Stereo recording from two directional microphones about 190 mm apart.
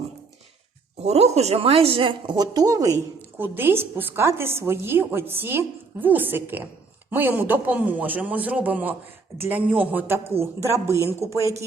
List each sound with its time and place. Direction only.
1.0 s a woman's voice: 35° right (ahead or behind); by 11.1 s 15° right (ahead or behind)